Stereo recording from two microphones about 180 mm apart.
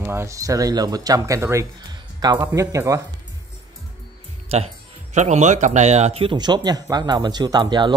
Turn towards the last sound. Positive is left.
turn(degrees=-25)  # may be behind; listen again after turning